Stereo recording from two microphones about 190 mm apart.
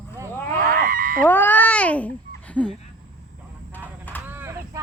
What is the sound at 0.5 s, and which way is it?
Goose, 50° right (ahead or behind).